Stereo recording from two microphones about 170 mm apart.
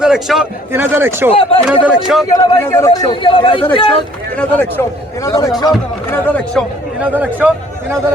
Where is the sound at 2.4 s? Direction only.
15° left (ahead or behind).